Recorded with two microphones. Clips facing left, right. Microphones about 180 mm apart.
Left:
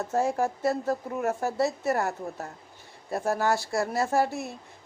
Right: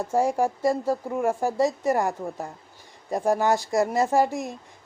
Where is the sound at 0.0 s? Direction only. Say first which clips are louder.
Right 3 dB; 10° right (ahead or behind).